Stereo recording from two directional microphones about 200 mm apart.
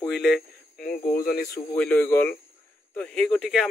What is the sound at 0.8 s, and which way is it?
Speech, 45° left (ahead or behind).